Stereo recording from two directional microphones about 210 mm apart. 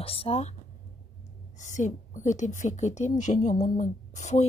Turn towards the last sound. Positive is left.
turn(degrees=35)  # may be behind; listen again after turning